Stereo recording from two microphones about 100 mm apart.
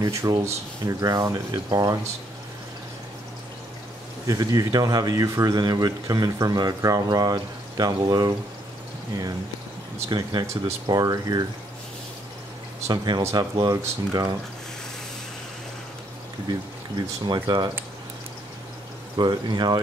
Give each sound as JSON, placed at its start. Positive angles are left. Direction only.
{"t": 0.0, "sound": "speech", "side_deg": -35}
{"t": 4.3, "sound": "speech", "side_deg": -40}
{"t": 10.0, "sound": "speech", "side_deg": -40}
{"t": 12.8, "sound": "speech", "side_deg": -45}
{"t": 17.3, "sound": "speech", "side_deg": -50}
{"t": 19.1, "sound": "speech", "side_deg": -45}